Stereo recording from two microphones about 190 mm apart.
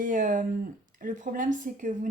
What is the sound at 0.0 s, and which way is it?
A woman's voice, 45° right (ahead or behind).